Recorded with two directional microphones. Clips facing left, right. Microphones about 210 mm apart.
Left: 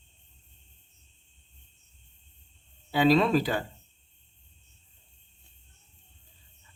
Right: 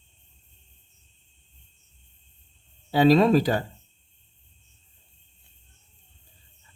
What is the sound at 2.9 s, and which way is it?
Speech, 40° right (ahead or behind).